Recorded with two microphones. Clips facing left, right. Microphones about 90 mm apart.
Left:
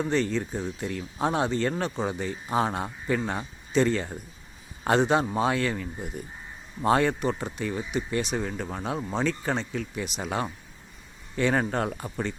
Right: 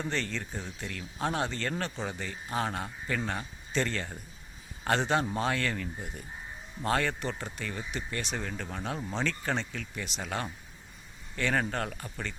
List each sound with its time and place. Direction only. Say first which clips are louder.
0.1 s speech: left 8 dB; 10° left (ahead or behind)